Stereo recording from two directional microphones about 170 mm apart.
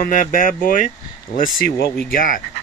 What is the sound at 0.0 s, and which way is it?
Speech, 50° left (ahead or behind).